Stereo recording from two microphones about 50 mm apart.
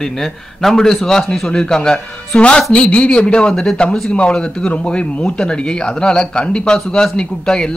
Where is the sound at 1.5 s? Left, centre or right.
Centre.